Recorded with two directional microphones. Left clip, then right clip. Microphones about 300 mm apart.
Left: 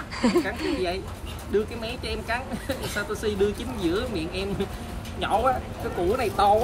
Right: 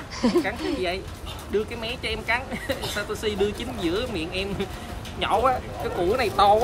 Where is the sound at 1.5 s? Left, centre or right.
Centre.